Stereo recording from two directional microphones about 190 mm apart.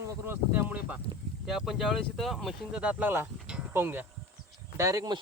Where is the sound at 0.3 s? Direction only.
10° right (ahead or behind).